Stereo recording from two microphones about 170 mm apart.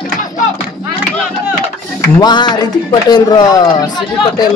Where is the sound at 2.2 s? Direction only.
25° left (ahead or behind).